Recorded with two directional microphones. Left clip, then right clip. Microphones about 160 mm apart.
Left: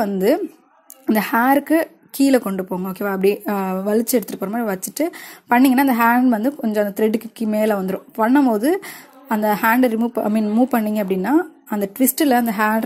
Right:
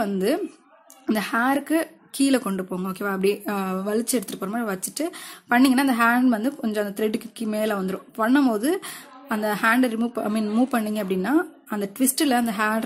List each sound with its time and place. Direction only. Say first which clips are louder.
1.1 s speech: left 6 dB; 25° left (ahead or behind)